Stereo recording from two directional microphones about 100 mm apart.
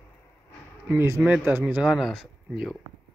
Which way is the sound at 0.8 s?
25° right (ahead or behind).